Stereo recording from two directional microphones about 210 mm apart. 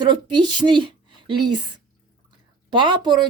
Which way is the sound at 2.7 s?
20° right (ahead or behind).